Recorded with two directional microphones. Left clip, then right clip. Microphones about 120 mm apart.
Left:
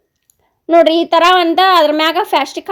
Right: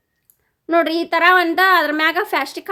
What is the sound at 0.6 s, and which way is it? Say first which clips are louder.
A woman's voice: left 8 dB; 20° left (ahead or behind).